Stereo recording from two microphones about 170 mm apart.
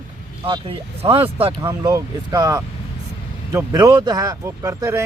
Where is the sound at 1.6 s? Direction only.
20° right (ahead or behind).